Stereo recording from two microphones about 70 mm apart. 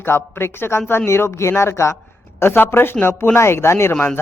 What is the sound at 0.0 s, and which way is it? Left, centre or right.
Speech, left.